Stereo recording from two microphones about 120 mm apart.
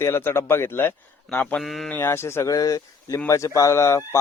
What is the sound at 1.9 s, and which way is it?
Speech, 20° left (ahead or behind).